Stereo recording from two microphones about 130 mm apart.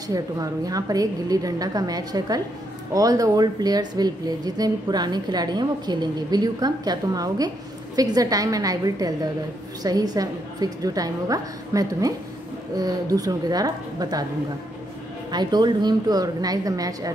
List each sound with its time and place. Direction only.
0.1 s a woman's voice: 30° right (ahead or behind)
15.3 s a woman's voice: 35° right (ahead or behind)